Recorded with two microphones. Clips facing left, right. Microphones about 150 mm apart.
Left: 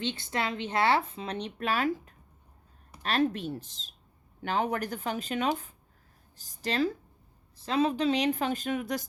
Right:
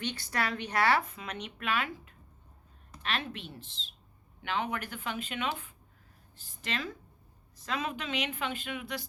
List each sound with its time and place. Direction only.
0.0 s a woman's voice: 25° left (ahead or behind); by 9.0 s 45° left (ahead or behind)